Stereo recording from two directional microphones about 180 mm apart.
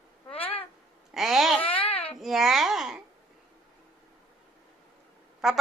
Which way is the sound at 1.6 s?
30° left (ahead or behind).